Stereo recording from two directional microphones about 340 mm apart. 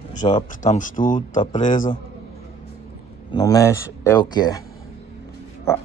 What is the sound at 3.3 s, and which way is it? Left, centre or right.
Speech, centre.